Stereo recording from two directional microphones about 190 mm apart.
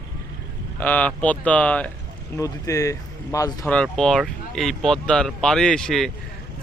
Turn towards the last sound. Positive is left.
turn(degrees=0)  # may be behind; listen again after turning